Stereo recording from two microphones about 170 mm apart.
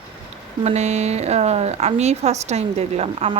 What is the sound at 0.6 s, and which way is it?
Speech, 40° right (ahead or behind).